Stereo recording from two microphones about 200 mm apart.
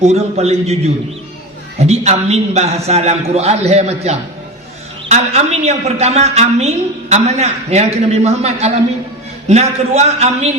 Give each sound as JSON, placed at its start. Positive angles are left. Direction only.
{"t": 0.0, "sound": "a woman's voice", "side_deg": -30}
{"t": 1.8, "sound": "a woman's voice", "side_deg": -30}